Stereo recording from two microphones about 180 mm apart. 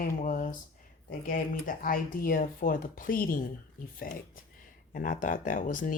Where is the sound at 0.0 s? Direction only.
45° left (ahead or behind).